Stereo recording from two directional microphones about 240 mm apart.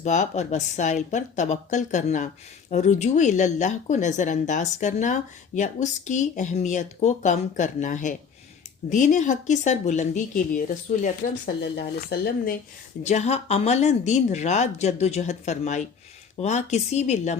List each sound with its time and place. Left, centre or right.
0.0 s speech: left
12.1 s speech: left
13.0 s speech: left